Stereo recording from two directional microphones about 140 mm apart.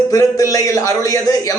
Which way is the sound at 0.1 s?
25° left (ahead or behind).